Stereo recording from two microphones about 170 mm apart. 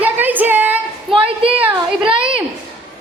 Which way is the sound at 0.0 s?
10° right (ahead or behind).